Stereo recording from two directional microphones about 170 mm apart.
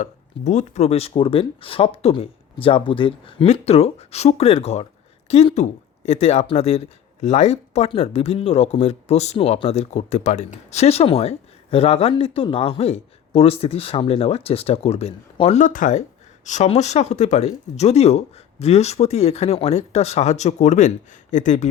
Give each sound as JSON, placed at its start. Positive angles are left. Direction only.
{"t": 0.0, "sound": "speech", "side_deg": 45}